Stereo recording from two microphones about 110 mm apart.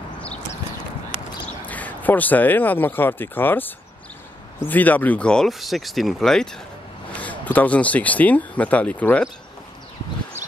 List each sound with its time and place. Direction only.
1.6 s speech: 15° left (ahead or behind)